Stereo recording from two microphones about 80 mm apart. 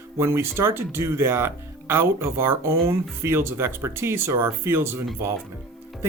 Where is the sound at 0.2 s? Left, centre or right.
Right.